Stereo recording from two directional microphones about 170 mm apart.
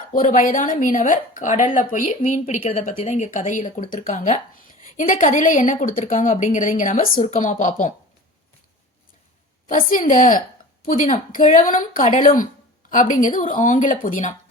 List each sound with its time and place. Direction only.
0.1 s a woman's voice: 50° left (ahead or behind)
9.6 s a woman's voice: 50° left (ahead or behind)